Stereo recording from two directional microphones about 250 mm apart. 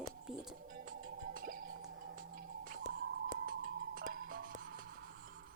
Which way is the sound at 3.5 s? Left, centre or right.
Right.